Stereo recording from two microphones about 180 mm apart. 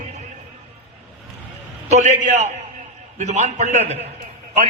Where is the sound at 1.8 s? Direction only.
40° right (ahead or behind).